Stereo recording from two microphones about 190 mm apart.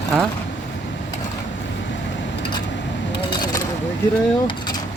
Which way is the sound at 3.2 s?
25° left (ahead or behind).